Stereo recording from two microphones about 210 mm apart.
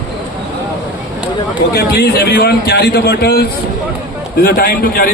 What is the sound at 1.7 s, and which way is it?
A man's voice, 50° left (ahead or behind).